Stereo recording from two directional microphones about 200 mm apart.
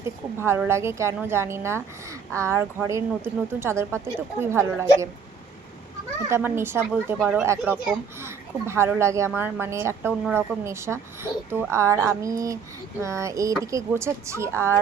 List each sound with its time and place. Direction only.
0.3 s a woman's voice: 10° right (ahead or behind)
6.2 s a woman's voice: 10° right (ahead or behind)